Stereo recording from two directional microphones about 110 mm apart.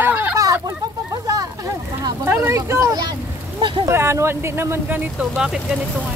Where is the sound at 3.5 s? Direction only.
45° right (ahead or behind).